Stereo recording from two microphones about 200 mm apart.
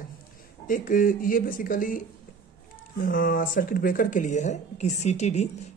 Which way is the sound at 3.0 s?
45° left (ahead or behind).